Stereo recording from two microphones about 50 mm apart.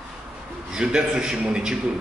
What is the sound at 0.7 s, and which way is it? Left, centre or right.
A man's voice, centre.